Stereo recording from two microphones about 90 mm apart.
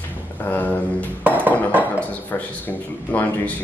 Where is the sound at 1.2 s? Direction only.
20° right (ahead or behind).